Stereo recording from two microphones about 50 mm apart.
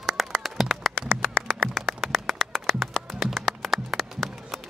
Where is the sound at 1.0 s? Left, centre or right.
Right.